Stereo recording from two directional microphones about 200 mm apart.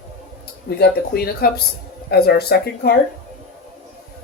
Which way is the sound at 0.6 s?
50° left (ahead or behind).